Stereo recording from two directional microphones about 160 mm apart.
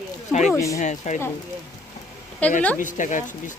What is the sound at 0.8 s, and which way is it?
Speech, 50° left (ahead or behind).